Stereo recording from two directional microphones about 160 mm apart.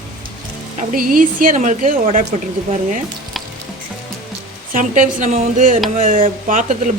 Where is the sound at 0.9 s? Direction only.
60° right (ahead or behind).